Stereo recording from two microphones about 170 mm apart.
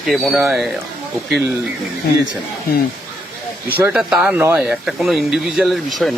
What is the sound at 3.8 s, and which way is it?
Speech, 5° right (ahead or behind).